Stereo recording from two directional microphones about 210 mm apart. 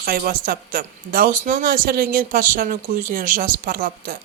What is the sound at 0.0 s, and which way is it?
A woman's voice, 45° right (ahead or behind).